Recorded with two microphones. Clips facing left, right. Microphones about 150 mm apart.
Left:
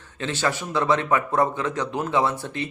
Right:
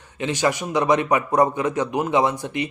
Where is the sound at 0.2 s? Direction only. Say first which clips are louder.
Right 4 dB; 15° right (ahead or behind).